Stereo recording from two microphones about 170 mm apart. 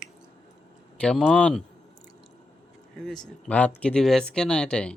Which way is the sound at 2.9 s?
Centre (ahead or behind).